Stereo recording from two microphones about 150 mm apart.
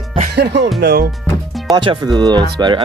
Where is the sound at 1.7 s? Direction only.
30° right (ahead or behind).